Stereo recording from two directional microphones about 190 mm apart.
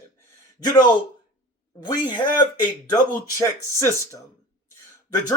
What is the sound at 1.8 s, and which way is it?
Speech, 20° left (ahead or behind).